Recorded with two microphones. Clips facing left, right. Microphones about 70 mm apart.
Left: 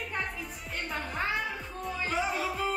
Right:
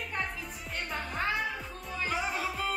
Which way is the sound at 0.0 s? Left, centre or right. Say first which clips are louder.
Left 1 dB; centre.